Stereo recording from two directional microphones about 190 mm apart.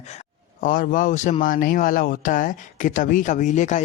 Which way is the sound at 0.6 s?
45° left (ahead or behind).